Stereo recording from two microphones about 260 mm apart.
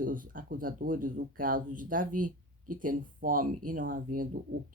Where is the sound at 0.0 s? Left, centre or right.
Right.